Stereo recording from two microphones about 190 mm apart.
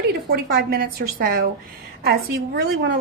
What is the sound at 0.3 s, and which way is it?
A woman's voice, 50° right (ahead or behind).